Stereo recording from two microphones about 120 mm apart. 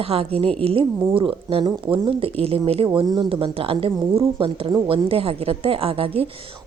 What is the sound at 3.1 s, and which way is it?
A woman's voice, 45° right (ahead or behind).